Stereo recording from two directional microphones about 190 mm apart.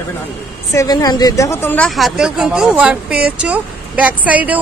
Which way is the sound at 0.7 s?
20° left (ahead or behind).